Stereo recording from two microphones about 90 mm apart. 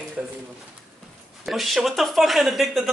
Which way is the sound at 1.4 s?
Centre (ahead or behind).